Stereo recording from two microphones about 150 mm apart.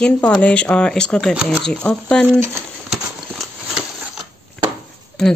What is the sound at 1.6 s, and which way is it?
Speech, 5° left (ahead or behind).